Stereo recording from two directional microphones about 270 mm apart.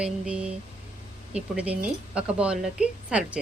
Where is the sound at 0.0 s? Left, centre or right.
Centre.